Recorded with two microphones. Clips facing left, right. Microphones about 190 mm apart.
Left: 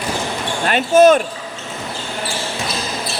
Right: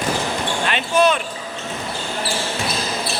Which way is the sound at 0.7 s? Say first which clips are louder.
Left 8 dB; 45° left (ahead or behind).